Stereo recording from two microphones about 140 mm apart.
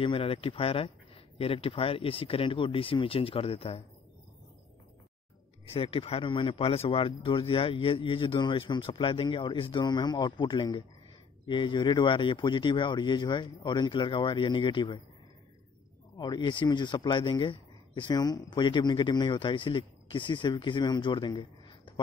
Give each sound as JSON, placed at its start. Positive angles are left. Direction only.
{"t": 0.0, "sound": "speech", "side_deg": 40}
{"t": 5.7, "sound": "speech", "side_deg": 40}
{"t": 16.2, "sound": "speech", "side_deg": 30}